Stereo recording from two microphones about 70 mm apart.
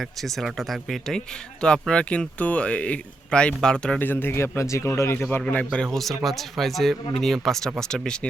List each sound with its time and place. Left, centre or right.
0.0 s speech: centre
1.9 s speech: centre
3.9 s speech: left
5.7 s speech: centre